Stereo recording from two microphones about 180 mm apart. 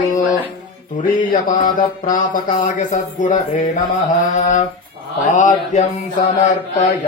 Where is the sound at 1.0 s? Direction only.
50° left (ahead or behind).